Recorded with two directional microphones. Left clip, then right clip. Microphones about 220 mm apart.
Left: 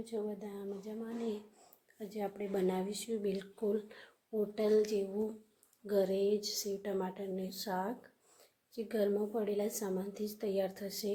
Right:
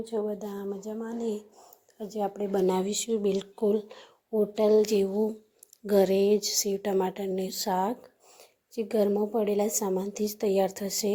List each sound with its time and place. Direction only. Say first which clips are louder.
0.0 s a woman's voice: right 9 dB; 15° right (ahead or behind)
0.3 s a woman's voice: right 8 dB; 25° right (ahead or behind)